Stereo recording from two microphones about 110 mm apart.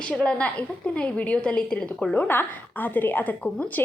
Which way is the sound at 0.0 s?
10° left (ahead or behind).